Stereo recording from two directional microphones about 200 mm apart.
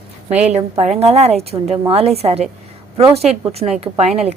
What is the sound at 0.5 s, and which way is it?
A woman's voice, 30° right (ahead or behind).